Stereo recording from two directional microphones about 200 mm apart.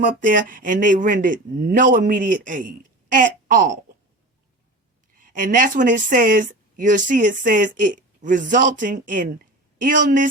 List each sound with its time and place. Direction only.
0.0 s speech: 40° right (ahead or behind)
5.1 s speech: 40° right (ahead or behind)